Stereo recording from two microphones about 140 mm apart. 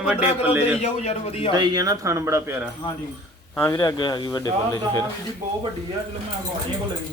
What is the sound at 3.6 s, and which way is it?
Speech, 20° left (ahead or behind).